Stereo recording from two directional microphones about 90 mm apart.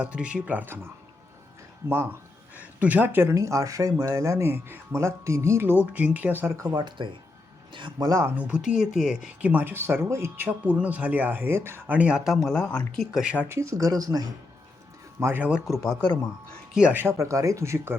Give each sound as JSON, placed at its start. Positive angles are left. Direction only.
{"t": 0.0, "sound": "speech", "side_deg": -15}
{"t": 2.6, "sound": "speech", "side_deg": -20}
{"t": 6.7, "sound": "speech", "side_deg": -60}
{"t": 8.4, "sound": "speech", "side_deg": -15}
{"t": 12.4, "sound": "speech", "side_deg": 5}
{"t": 13.3, "sound": "speech", "side_deg": -20}
{"t": 13.6, "sound": "speech", "side_deg": -35}
{"t": 15.2, "sound": "speech", "side_deg": -25}
{"t": 15.6, "sound": "speech", "side_deg": 0}
{"t": 16.9, "sound": "speech", "side_deg": -25}